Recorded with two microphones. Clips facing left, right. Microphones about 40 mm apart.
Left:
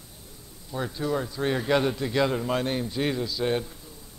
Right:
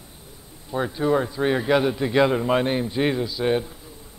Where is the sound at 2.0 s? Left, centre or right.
Right.